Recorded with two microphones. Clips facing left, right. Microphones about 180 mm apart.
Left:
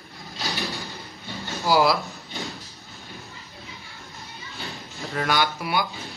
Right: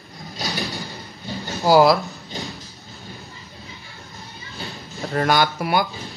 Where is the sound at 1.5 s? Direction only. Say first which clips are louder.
Right 6 dB; 40° right (ahead or behind).